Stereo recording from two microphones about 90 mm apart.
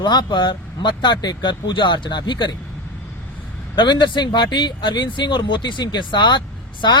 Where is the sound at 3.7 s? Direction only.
55° left (ahead or behind).